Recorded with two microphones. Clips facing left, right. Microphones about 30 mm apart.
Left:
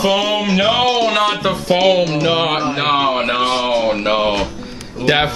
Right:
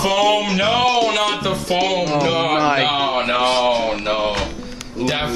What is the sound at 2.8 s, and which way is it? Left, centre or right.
Music, centre.